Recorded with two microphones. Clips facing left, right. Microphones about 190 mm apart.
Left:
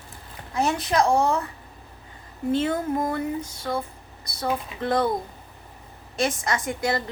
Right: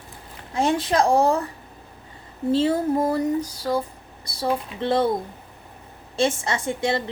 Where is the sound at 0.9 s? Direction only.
35° right (ahead or behind).